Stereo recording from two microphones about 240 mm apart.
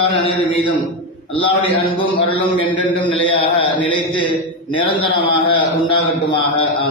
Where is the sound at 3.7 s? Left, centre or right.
Centre.